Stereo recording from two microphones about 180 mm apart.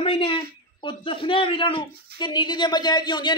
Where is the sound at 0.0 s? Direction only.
30° left (ahead or behind).